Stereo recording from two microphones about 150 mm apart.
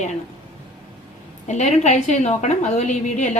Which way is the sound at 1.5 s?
50° left (ahead or behind).